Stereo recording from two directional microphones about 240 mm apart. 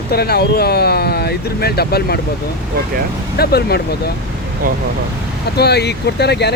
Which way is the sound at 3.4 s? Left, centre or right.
Left.